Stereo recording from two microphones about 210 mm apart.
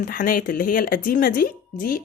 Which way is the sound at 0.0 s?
40° left (ahead or behind).